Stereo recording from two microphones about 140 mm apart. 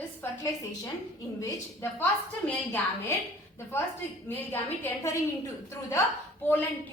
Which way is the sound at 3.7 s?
15° left (ahead or behind).